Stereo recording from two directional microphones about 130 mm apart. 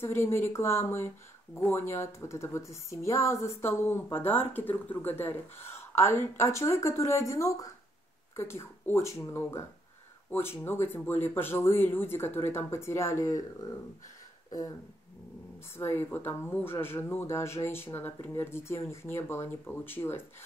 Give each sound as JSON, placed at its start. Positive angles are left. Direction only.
{"t": 0.0, "sound": "speech", "side_deg": 20}
{"t": 15.7, "sound": "speech", "side_deg": 20}